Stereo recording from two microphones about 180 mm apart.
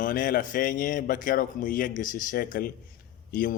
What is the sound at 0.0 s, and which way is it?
Speech, 50° left (ahead or behind).